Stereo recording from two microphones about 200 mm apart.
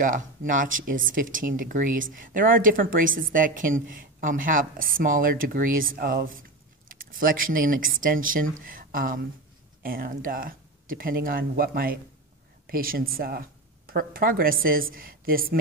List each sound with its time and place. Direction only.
0.0 s a woman's voice: 40° right (ahead or behind)